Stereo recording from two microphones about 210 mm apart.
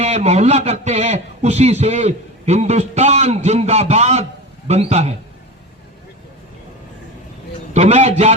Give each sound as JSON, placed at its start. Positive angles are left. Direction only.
{"t": 0.0, "sound": "a man's voice", "side_deg": -30}
{"t": 7.7, "sound": "a man's voice", "side_deg": -30}